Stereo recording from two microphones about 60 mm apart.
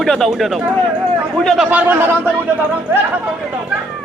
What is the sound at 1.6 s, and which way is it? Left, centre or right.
Speech, right.